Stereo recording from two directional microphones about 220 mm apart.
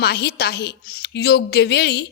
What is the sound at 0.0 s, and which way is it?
A woman's voice, 45° left (ahead or behind).